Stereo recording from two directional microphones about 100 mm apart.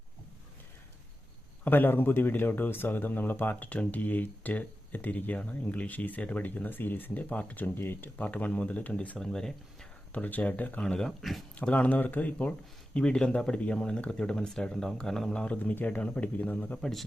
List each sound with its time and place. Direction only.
1.6 s speech: 20° left (ahead or behind)
10.1 s speech: 15° left (ahead or behind); by 11.4 s centre (ahead or behind)
11.5 s speech: 15° left (ahead or behind)